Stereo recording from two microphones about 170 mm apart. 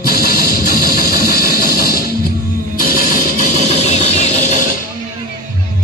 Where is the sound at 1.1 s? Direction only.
65° left (ahead or behind).